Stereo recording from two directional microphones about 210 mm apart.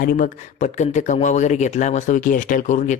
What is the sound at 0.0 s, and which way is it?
Speech, 40° left (ahead or behind).